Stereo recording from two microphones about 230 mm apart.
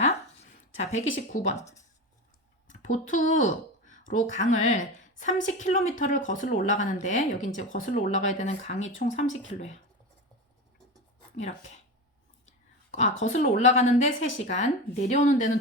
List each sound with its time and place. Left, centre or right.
0.8 s a woman's voice: left
2.6 s speech: left
3.5 s a sound: left
4.1 s a woman's voice: left
12.5 s a sound: left
13.2 s a woman's voice: left